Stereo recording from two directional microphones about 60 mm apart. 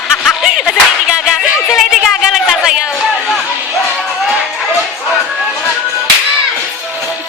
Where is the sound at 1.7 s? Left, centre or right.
Centre.